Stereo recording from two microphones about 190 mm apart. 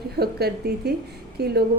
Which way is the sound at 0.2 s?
55° right (ahead or behind).